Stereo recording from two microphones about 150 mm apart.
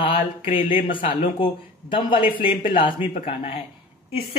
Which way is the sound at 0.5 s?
60° left (ahead or behind).